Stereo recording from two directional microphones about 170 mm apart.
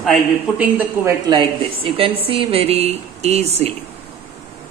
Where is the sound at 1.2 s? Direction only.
30° right (ahead or behind).